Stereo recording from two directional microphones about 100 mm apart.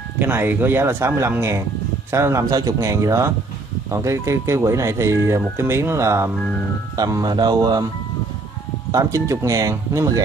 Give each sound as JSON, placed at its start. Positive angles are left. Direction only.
{"t": 0.2, "sound": "a man's voice", "side_deg": -20}
{"t": 8.9, "sound": "speech", "side_deg": -35}